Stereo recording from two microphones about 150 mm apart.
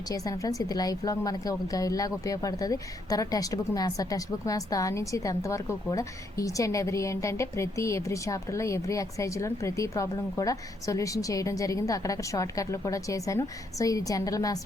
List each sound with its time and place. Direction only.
0.1 s a woman's voice: 25° left (ahead or behind)